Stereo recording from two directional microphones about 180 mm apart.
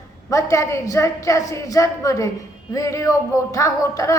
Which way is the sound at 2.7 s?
20° left (ahead or behind).